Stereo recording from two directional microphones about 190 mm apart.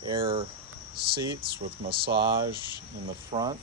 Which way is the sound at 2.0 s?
60° right (ahead or behind).